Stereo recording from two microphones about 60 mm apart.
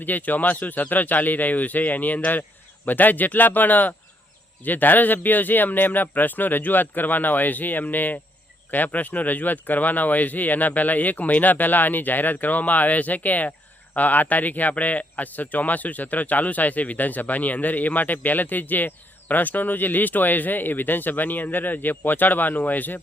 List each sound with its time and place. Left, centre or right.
0.0 s speech: left